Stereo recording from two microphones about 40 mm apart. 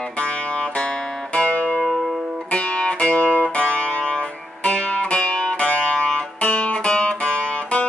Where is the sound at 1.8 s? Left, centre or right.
Centre.